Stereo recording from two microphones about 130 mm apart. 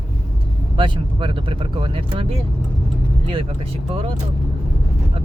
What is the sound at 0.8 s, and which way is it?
Speech, 40° right (ahead or behind).